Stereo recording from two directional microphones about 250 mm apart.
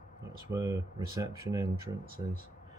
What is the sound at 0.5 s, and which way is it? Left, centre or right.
Speech, centre.